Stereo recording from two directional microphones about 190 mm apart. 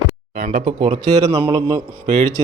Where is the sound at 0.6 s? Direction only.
35° right (ahead or behind).